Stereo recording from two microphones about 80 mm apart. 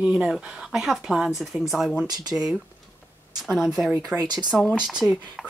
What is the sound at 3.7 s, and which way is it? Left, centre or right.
Speech, centre.